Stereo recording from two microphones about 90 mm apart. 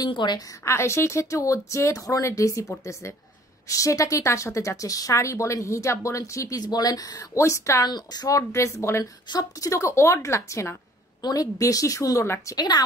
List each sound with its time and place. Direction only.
0.1 s a woman's voice: 60° left (ahead or behind)
0.7 s a woman's voice: 30° left (ahead or behind)
7.9 s a woman's voice: 50° left (ahead or behind); by 9.0 s 30° left (ahead or behind)
9.0 s a woman's voice: 40° left (ahead or behind)
12.5 s a woman's voice: 50° left (ahead or behind)